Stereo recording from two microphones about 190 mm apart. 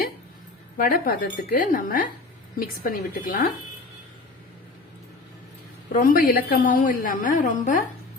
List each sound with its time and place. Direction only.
0.8 s a woman's voice: 50° left (ahead or behind)
5.9 s a woman's voice: 45° left (ahead or behind)